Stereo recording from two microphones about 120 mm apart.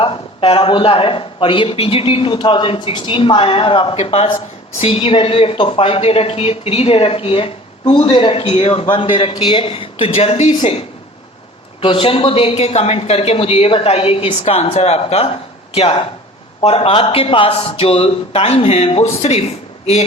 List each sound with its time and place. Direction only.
0.0 s speech: 50° left (ahead or behind)
8.9 s speech: 45° left (ahead or behind); by 10.5 s 65° left (ahead or behind)
10.6 s speech: 55° left (ahead or behind)